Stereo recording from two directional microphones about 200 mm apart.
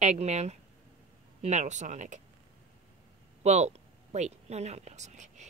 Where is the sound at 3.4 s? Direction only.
35° right (ahead or behind).